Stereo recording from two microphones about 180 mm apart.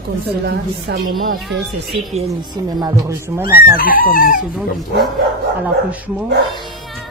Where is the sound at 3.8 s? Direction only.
50° left (ahead or behind).